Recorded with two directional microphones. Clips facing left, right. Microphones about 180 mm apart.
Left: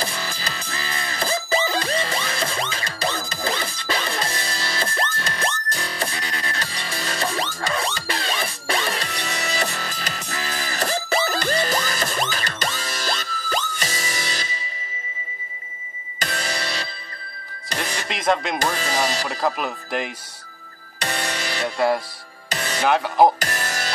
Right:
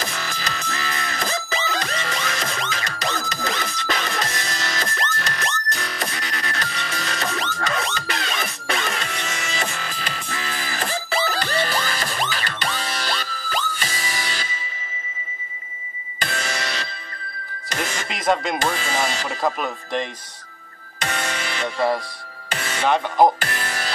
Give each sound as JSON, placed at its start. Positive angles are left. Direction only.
{"t": 0.0, "sound": "music", "side_deg": 30}
{"t": 16.2, "sound": "music", "side_deg": 40}
{"t": 18.0, "sound": "music", "side_deg": 0}
{"t": 18.6, "sound": "speech", "side_deg": 40}
{"t": 19.2, "sound": "speech", "side_deg": 5}
{"t": 21.1, "sound": "music", "side_deg": 35}
{"t": 21.6, "sound": "music", "side_deg": 5}
{"t": 22.5, "sound": "music", "side_deg": 40}
{"t": 22.8, "sound": "speech", "side_deg": 5}
{"t": 23.4, "sound": "music", "side_deg": 40}